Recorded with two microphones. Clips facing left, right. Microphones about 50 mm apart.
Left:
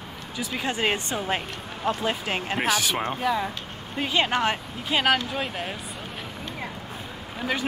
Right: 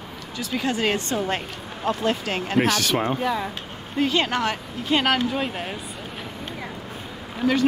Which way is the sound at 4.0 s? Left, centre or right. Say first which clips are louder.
Right 2 dB; centre.